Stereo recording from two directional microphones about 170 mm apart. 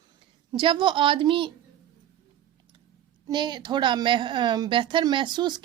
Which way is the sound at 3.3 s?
25° right (ahead or behind).